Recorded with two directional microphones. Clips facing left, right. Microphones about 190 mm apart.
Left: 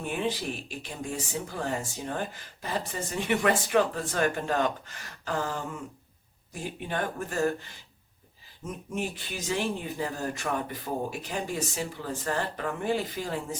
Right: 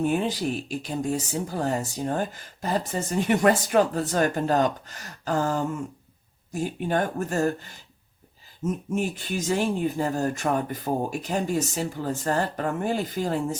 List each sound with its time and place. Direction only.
0.0 s speech: 40° right (ahead or behind)
8.6 s speech: 45° right (ahead or behind)